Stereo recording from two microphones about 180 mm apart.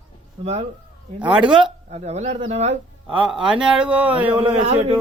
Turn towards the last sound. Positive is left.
turn(degrees=-35)  # may be behind; listen again after turning